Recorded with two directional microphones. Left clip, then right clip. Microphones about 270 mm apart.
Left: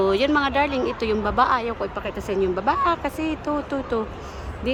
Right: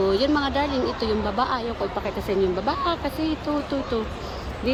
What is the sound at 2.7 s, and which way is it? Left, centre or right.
Speech, centre.